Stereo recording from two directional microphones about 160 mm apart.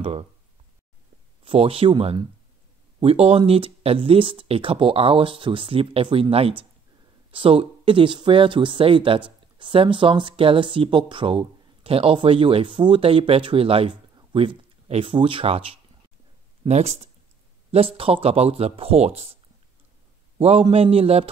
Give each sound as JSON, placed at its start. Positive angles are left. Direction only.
{"t": 1.4, "sound": "speech", "side_deg": -35}
{"t": 14.1, "sound": "a sound", "side_deg": -35}
{"t": 14.9, "sound": "speech", "side_deg": -35}
{"t": 20.3, "sound": "speech", "side_deg": -35}